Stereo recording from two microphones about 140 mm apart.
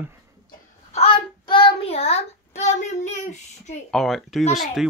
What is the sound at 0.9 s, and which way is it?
Child singing, 40° left (ahead or behind).